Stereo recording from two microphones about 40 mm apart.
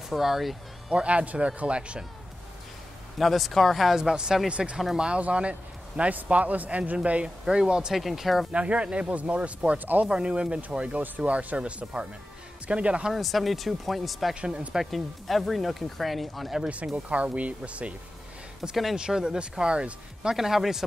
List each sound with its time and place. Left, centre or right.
0.1 s speech: centre
0.8 s speech: right
3.2 s a man's voice: centre; by 7.2 s right
7.4 s speech: centre
8.5 s speech: right
9.1 s speech: right
13.1 s speech: centre
16.6 s speech: right
18.9 s speech: centre
20.3 s speech: centre